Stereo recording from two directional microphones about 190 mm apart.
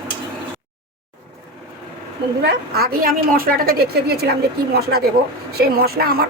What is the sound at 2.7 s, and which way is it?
A woman's voice, 50° right (ahead or behind).